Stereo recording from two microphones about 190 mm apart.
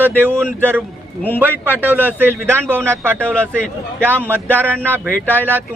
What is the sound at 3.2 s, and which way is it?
Speech, 5° left (ahead or behind).